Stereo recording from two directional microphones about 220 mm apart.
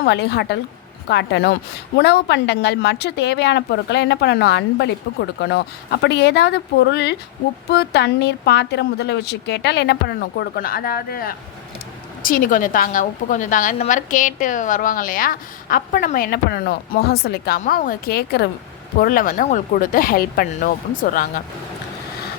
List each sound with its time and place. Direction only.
0.0 s a woman's voice: 50° left (ahead or behind)